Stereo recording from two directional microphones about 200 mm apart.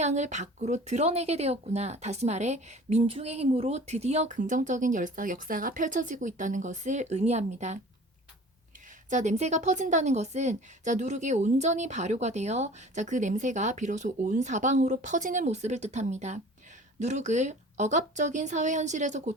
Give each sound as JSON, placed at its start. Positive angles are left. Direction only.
{"t": 0.0, "sound": "speech", "side_deg": -35}
{"t": 9.0, "sound": "speech", "side_deg": -35}